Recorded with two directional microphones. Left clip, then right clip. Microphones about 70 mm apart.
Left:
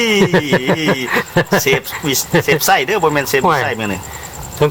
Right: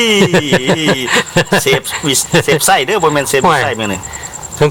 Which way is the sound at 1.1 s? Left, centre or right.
Right.